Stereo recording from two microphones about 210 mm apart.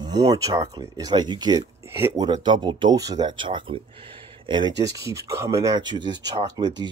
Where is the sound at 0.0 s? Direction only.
20° right (ahead or behind).